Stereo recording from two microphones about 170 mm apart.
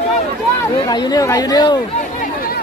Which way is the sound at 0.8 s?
20° left (ahead or behind).